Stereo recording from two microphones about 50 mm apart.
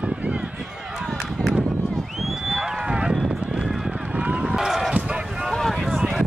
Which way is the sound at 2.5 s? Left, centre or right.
Centre.